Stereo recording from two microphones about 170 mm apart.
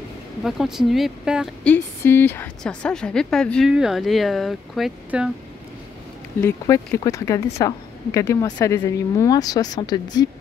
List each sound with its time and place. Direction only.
0.4 s speech: centre (ahead or behind)
1.6 s speech: 10° left (ahead or behind)
6.4 s a woman's voice: 15° left (ahead or behind)